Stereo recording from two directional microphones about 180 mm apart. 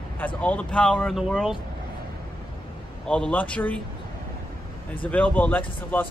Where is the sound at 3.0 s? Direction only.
5° left (ahead or behind).